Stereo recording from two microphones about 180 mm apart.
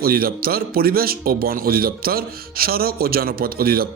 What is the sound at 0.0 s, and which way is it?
Speech, 55° right (ahead or behind).